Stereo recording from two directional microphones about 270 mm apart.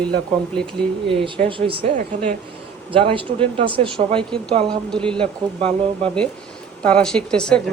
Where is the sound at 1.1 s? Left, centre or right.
Centre.